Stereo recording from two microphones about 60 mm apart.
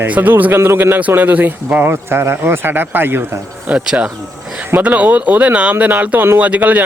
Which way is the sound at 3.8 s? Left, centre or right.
Centre.